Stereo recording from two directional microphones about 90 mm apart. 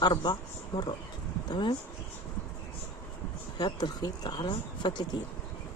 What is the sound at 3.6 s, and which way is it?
Speech, 50° left (ahead or behind).